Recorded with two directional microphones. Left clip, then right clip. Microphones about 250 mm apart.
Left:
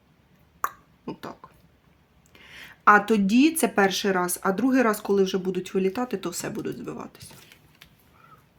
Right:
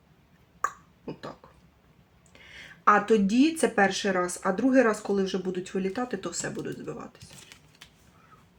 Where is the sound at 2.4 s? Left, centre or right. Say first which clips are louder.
Left 3 dB; left.